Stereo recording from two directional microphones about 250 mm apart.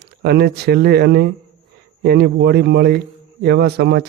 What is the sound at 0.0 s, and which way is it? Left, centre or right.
Speech, right.